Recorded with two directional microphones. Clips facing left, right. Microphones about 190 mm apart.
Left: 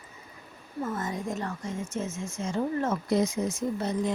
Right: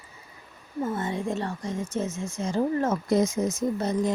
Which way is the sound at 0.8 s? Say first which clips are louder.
Right 3 dB; 30° right (ahead or behind).